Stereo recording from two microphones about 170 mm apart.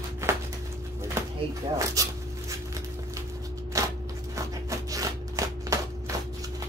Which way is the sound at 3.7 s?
20° right (ahead or behind).